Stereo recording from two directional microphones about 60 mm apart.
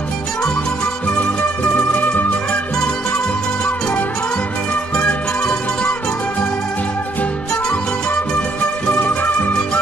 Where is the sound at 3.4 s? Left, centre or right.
Centre.